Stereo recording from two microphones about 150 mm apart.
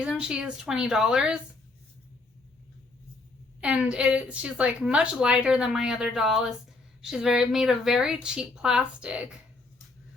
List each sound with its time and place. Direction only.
0.0 s a woman's voice: 5° right (ahead or behind)
3.6 s a woman's voice: 5° right (ahead or behind)